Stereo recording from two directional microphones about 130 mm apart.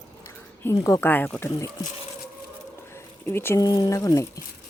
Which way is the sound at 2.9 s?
20° left (ahead or behind).